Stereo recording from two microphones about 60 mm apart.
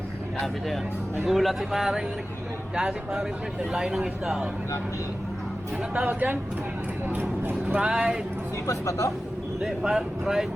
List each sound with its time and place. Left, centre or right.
1.2 s speech: centre
5.7 s speech: centre; by 7.8 s right
7.8 s speech: centre
8.6 s speech: left
9.6 s speech: centre